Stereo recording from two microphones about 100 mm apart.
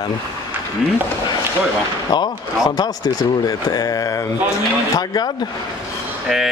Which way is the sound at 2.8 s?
40° left (ahead or behind).